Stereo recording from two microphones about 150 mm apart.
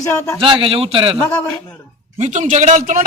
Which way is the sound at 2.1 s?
50° right (ahead or behind).